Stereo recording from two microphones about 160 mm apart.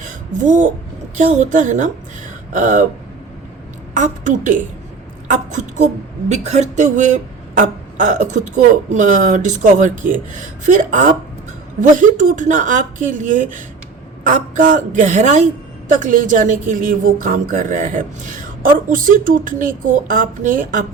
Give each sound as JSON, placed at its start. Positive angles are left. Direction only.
{"t": 0.0, "sound": "a sound", "side_deg": -50}
{"t": 1.2, "sound": "speech", "side_deg": -50}
{"t": 3.9, "sound": "a woman's voice", "side_deg": -50}